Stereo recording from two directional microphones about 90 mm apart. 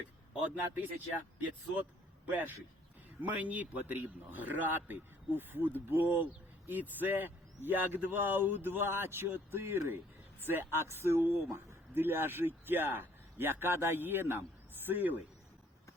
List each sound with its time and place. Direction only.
0.8 s speech: 20° right (ahead or behind)
3.2 s a man's voice: 15° right (ahead or behind)